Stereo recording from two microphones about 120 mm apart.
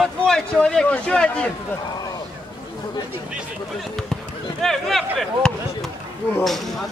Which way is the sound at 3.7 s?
Centre (ahead or behind).